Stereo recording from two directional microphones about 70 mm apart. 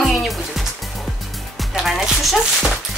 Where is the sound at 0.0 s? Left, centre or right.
Centre.